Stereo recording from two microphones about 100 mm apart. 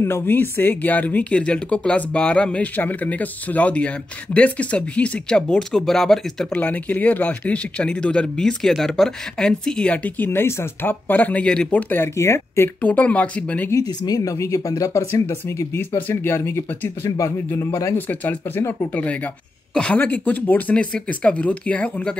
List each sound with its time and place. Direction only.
0.0 s speech: 20° left (ahead or behind); by 6.6 s 5° left (ahead or behind)
6.6 s speech: 15° left (ahead or behind)
13.7 s speech: 40° left (ahead or behind)
17.9 s speech: 15° left (ahead or behind)
18.6 s speech: 30° left (ahead or behind)
19.7 s speech: 10° left (ahead or behind)